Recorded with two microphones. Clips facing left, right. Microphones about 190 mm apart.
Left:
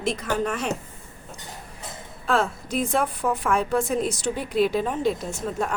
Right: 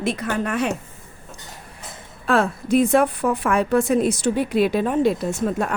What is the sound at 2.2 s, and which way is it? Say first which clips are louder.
A woman's voice: right 5 dB; 65° right (ahead or behind).